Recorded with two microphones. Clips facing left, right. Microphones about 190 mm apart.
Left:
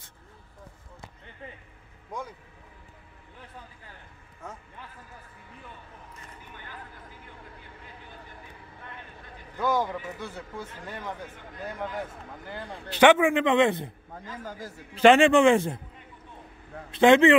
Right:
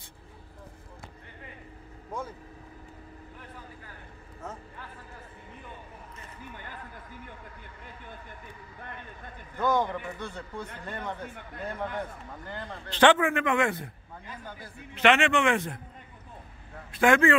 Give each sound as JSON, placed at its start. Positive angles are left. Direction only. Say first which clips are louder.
{"t": 9.6, "sound": "a man's voice", "louder": "even", "side_deg": 5}
{"t": 14.4, "sound": "a man's voice", "louder": "left 5 dB", "side_deg": 40}
{"t": 15.0, "sound": "a man's voice", "louder": "left 6 dB", "side_deg": 30}
{"t": 16.9, "sound": "a man's voice", "louder": "left 5 dB", "side_deg": 20}